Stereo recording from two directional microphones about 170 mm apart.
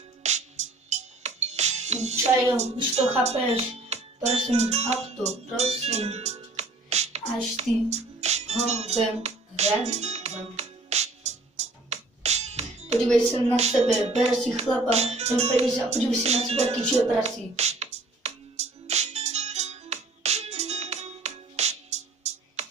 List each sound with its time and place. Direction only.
0.2 s music: 45° right (ahead or behind)
3.3 s speech: 40° right (ahead or behind)
7.5 s music: 40° right (ahead or behind)
13.3 s speech: 40° right (ahead or behind)
14.9 s music: 40° right (ahead or behind)